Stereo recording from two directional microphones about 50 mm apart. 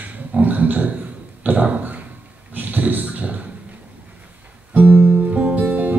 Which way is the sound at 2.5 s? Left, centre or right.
Right.